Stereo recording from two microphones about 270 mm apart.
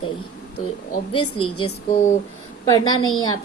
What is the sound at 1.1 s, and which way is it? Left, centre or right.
Speech, left.